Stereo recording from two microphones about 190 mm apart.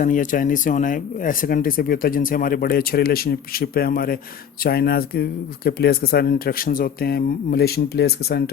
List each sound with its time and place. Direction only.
0.0 s speech: 45° left (ahead or behind)